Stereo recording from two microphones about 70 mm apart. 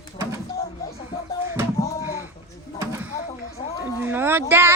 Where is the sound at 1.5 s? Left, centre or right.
Right.